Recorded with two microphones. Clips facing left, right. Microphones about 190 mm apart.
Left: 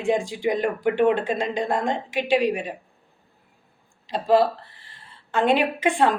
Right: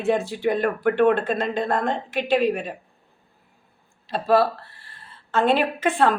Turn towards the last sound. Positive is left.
turn(degrees=15)  # may be behind; listen again after turning